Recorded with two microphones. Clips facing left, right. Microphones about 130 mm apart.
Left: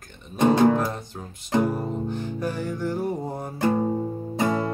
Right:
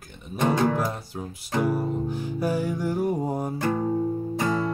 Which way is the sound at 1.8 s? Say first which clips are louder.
Right 1 dB; 10° right (ahead or behind).